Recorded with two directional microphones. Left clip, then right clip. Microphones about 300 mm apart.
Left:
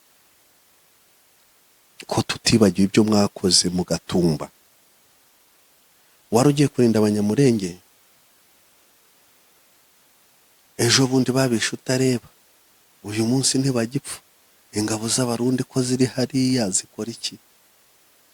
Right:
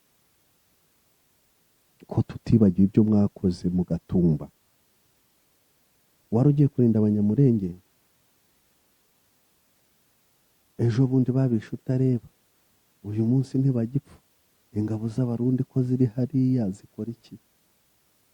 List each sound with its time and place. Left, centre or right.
2.0 s speech: centre
3.7 s speech: centre
3.9 s speech: centre
4.2 s speech: centre
6.3 s speech: centre
10.8 s speech: centre
13.4 s speech: centre